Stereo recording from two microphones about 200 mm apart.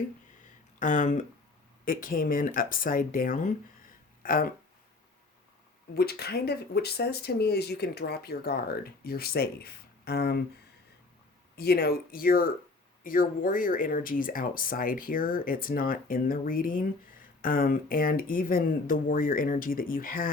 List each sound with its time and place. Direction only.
0.8 s speech: 40° left (ahead or behind)
5.9 s speech: 50° left (ahead or behind)
11.5 s speech: 55° left (ahead or behind)